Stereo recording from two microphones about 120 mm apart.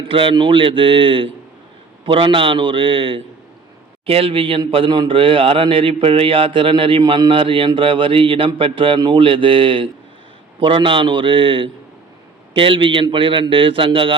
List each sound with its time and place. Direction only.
0.0 s a man's voice: 45° right (ahead or behind)